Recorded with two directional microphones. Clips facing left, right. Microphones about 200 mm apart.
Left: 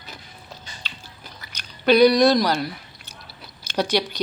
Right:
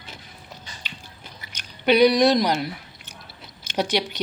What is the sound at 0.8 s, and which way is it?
Biting, 15° right (ahead or behind).